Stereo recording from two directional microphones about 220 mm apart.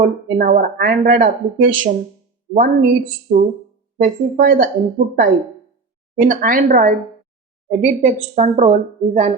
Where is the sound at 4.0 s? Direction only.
35° right (ahead or behind).